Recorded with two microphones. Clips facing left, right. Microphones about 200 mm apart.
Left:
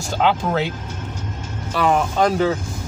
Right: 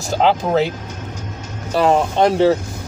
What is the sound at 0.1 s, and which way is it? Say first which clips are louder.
Speech: right 4 dB; 40° right (ahead or behind).